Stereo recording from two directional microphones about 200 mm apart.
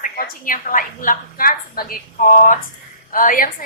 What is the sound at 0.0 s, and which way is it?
A woman's voice, 45° left (ahead or behind).